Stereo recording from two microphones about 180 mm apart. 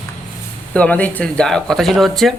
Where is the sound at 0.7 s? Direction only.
10° left (ahead or behind).